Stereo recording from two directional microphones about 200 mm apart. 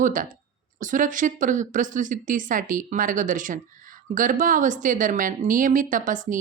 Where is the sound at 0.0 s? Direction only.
40° right (ahead or behind).